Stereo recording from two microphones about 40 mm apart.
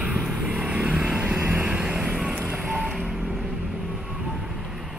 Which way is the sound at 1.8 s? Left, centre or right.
Centre.